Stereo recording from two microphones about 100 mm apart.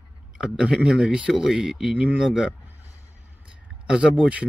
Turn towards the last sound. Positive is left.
turn(degrees=-10)  # may be behind; listen again after turning